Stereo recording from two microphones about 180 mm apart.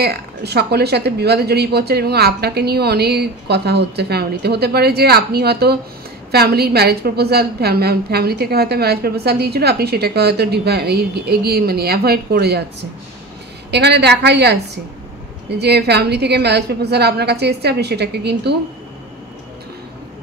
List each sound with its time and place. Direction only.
0.0 s a woman's voice: 65° right (ahead or behind)
13.7 s a woman's voice: 70° right (ahead or behind)
15.6 s a woman's voice: 65° right (ahead or behind)